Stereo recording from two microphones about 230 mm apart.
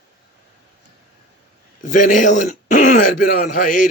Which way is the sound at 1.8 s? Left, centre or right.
Left.